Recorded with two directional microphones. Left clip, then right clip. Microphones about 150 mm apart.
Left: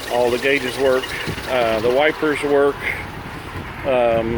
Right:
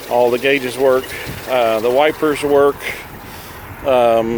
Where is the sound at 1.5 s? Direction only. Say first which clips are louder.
Right 3 dB; 40° right (ahead or behind).